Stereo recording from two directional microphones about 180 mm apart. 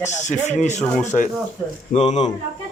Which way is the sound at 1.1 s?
45° left (ahead or behind).